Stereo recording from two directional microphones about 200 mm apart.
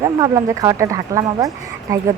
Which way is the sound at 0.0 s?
15° right (ahead or behind).